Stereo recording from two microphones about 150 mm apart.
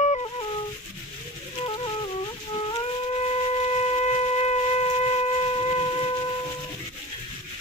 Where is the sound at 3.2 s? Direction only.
40° left (ahead or behind).